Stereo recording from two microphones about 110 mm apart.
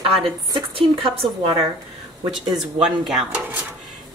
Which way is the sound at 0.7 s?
55° right (ahead or behind).